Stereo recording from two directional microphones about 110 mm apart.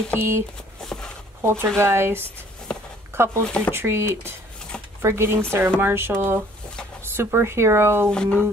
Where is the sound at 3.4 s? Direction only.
10° left (ahead or behind).